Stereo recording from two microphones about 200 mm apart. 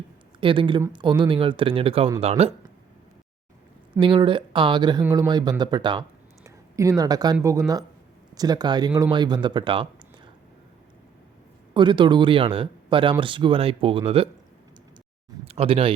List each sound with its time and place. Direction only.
0.3 s speech: 25° right (ahead or behind)
4.0 s speech: 25° right (ahead or behind)
5.0 s speech: 10° right (ahead or behind)
5.3 s speech: 20° right (ahead or behind)
11.7 s speech: 25° right (ahead or behind)
15.4 s speech: 30° right (ahead or behind)